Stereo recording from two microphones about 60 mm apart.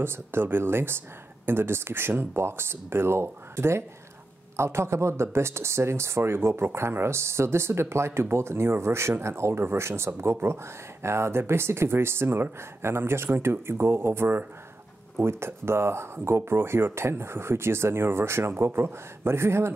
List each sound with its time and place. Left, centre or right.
0.0 s speech: right